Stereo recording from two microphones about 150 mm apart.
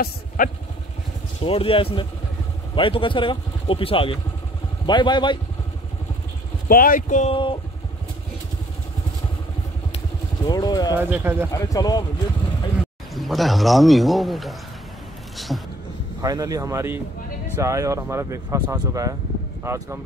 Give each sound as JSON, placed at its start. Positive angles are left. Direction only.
{"t": 0.4, "sound": "speech", "side_deg": 65}
{"t": 1.4, "sound": "speech", "side_deg": 35}
{"t": 6.7, "sound": "speech", "side_deg": 70}
{"t": 7.2, "sound": "speech", "side_deg": 35}
{"t": 10.4, "sound": "speech", "side_deg": 25}
{"t": 11.0, "sound": "speech", "side_deg": -15}
{"t": 11.5, "sound": "speech", "side_deg": 25}
{"t": 13.1, "sound": "a man's voice", "side_deg": 0}
{"t": 15.3, "sound": "a sound", "side_deg": 0}
{"t": 16.2, "sound": "speech", "side_deg": -25}